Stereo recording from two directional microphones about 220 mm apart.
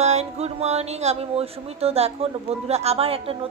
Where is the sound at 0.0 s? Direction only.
30° right (ahead or behind).